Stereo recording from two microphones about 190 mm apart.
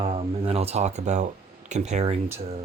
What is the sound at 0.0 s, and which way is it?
Speech, 35° right (ahead or behind).